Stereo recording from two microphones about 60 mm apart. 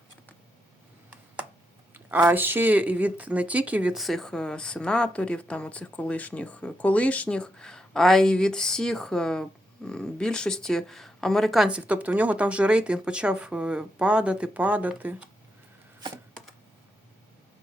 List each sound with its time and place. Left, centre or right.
1.9 s speech: right
3.9 s speech: centre
11.6 s speech: centre